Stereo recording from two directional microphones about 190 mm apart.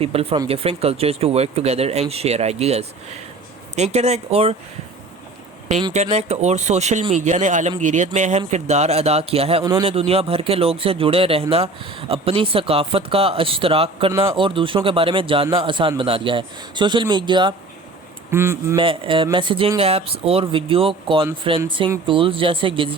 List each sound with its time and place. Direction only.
0.0 s speech: 30° right (ahead or behind)
5.9 s speech: 35° right (ahead or behind)
18.3 s speech: 15° right (ahead or behind)
18.8 s speech: 25° right (ahead or behind)